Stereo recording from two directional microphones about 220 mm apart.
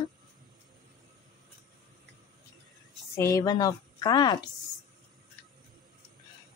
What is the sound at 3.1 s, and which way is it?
A woman's voice, 15° left (ahead or behind).